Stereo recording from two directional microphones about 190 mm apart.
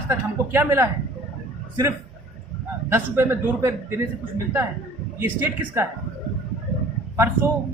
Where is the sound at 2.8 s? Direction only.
10° right (ahead or behind).